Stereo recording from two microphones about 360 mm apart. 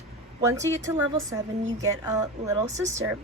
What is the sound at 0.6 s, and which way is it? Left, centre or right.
Speech, centre.